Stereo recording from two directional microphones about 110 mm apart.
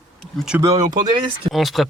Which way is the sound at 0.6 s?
35° right (ahead or behind).